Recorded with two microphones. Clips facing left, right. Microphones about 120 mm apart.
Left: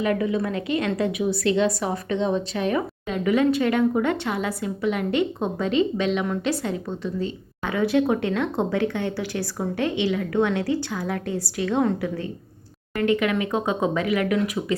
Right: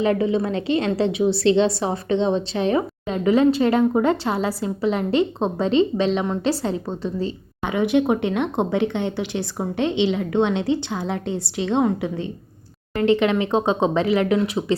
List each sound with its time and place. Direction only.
0.0 s a woman's voice: 30° right (ahead or behind)
7.6 s a woman's voice: 20° right (ahead or behind)